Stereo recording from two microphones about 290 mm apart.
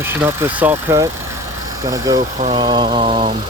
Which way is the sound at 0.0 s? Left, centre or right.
Centre.